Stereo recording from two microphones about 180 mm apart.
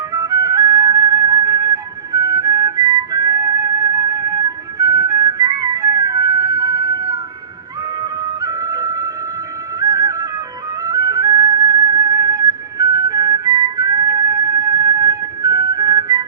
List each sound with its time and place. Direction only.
0.1 s flute: 20° right (ahead or behind)
8.0 s music: 20° right (ahead or behind)
10.8 s flute: 20° right (ahead or behind)